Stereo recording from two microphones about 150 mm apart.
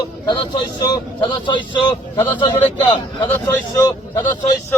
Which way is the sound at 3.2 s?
20° left (ahead or behind).